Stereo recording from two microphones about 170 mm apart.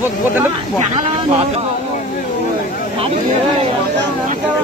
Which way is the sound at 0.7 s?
45° right (ahead or behind).